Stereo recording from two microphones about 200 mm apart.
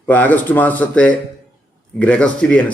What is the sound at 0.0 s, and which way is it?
A man's voice, 10° left (ahead or behind).